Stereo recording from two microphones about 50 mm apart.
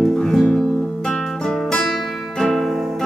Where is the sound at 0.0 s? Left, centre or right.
Centre.